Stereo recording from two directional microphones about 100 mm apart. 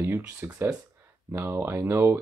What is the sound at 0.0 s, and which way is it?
Speech, 20° right (ahead or behind).